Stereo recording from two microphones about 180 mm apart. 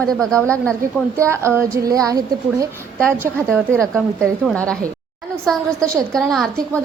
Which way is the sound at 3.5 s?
5° left (ahead or behind).